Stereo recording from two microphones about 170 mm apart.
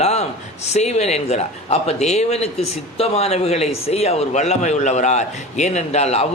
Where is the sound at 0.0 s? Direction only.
40° left (ahead or behind).